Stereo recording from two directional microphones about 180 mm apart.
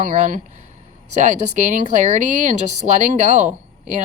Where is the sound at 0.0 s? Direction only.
45° right (ahead or behind).